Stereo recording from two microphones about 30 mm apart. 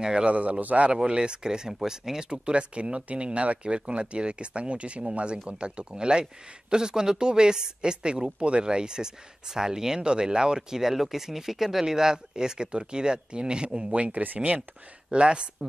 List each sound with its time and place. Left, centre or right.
0.0 s speech: right
0.3 s a man's voice: right
0.9 s speech: right
1.7 s speech: centre
2.4 s speech: right
10.8 s speech: centre; by 13.7 s right
13.9 s a man's voice: right
15.1 s speech: right